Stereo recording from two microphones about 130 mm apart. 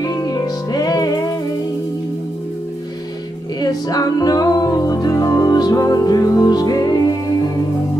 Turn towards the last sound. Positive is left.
turn(degrees=30)  # may be behind; listen again after turning